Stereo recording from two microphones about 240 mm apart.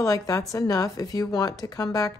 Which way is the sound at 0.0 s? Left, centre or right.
Centre.